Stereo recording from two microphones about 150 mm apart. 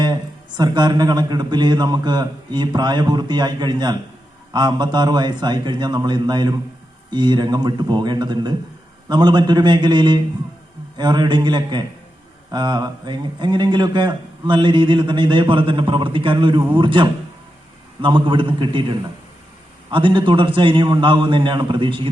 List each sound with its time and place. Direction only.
0.0 s a man's voice: 30° right (ahead or behind)